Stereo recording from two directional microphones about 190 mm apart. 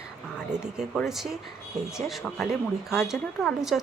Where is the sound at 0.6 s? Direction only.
Centre (ahead or behind).